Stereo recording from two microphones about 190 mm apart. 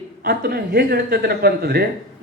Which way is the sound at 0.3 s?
50° right (ahead or behind).